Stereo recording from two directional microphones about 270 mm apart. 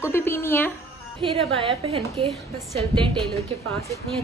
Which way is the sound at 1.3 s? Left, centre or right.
Right.